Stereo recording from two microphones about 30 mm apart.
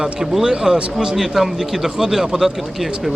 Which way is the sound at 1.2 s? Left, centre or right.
Centre.